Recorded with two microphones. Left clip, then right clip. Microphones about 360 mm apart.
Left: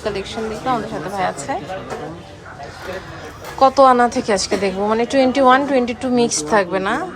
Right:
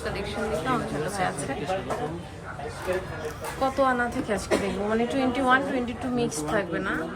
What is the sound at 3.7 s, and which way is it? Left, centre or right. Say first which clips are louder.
A woman's voice: left 11 dB; centre.